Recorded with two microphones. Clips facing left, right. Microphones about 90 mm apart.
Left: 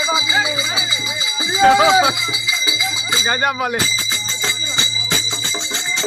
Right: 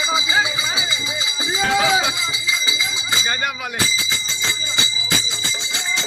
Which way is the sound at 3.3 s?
50° left (ahead or behind).